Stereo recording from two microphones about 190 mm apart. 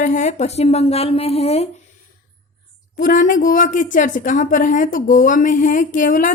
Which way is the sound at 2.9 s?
45° left (ahead or behind).